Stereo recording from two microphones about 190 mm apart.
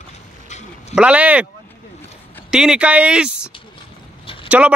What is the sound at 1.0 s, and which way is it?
Speech, 5° right (ahead or behind).